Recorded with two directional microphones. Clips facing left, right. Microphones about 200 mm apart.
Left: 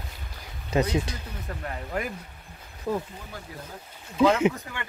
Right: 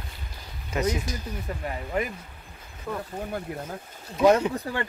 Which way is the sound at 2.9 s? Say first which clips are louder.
Left 4 dB; 25° left (ahead or behind).